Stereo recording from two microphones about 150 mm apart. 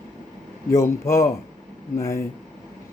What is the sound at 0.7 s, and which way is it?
Speech, 20° left (ahead or behind).